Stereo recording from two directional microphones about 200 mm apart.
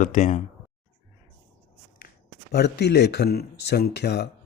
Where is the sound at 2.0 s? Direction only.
45° left (ahead or behind).